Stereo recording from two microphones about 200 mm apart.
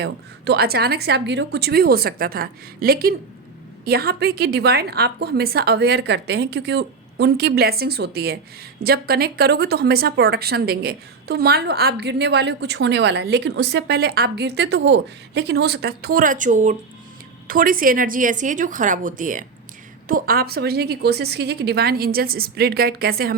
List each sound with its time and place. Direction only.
0.0 s a woman's voice: 55° right (ahead or behind)